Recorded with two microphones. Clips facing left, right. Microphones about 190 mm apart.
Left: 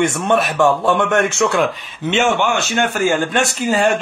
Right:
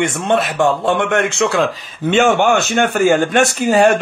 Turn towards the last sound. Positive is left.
turn(degrees=-45)  # may be behind; listen again after turning